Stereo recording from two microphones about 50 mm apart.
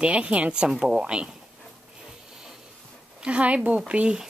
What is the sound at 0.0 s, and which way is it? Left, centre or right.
A woman's voice, right.